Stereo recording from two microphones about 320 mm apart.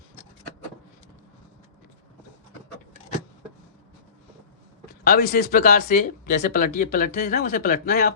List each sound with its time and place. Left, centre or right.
5.0 s speech: left